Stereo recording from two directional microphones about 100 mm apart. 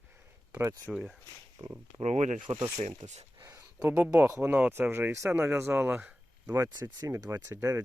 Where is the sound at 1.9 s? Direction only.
90° right.